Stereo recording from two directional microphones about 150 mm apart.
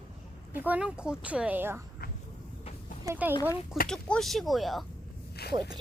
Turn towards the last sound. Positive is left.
turn(degrees=90)